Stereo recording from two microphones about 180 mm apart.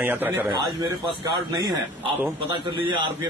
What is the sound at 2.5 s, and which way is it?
Speech, 25° right (ahead or behind).